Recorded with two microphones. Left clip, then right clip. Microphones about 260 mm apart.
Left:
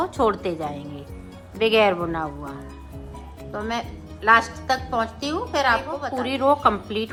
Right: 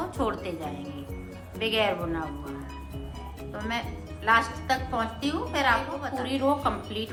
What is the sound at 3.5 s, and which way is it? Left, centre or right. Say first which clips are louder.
A woman's voice: left 5 dB; left.